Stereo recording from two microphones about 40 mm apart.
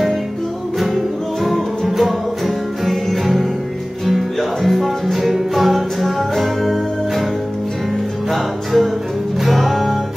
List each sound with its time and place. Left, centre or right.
1.9 s music: centre
8.3 s music: centre